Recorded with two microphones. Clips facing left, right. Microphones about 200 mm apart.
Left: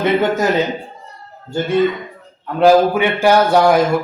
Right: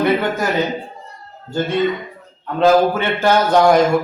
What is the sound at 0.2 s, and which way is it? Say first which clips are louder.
Speech: left 4 dB; 20° left (ahead or behind).